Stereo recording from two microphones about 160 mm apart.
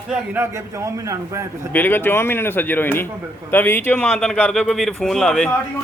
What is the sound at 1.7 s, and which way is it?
A man's voice, 10° left (ahead or behind).